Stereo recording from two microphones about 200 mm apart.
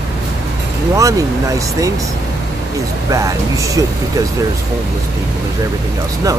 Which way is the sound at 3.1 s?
15° right (ahead or behind).